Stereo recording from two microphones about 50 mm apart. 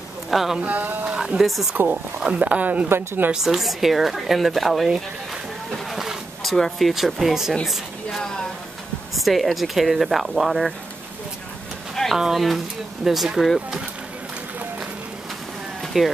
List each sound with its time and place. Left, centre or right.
0.3 s speech: centre
0.6 s speech: right
1.1 s speech: centre
1.8 s speech: right
3.3 s speech: centre
5.9 s vehicle: centre
6.5 s speech: centre
6.9 s a woman's voice: centre
11.9 s a sound: centre
12.2 s speech: centre
15.8 s a sound: centre